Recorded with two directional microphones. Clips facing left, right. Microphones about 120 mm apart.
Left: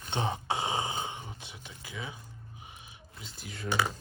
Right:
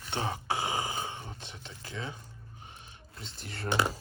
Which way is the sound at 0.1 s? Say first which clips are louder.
Left 1 dB; 20° left (ahead or behind).